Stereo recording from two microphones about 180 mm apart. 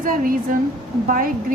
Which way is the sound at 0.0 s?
50° right (ahead or behind).